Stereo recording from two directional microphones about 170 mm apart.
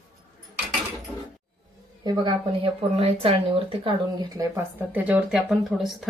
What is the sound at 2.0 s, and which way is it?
Speech, 25° right (ahead or behind).